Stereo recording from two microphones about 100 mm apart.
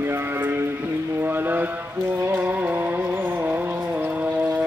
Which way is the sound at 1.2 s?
20° right (ahead or behind).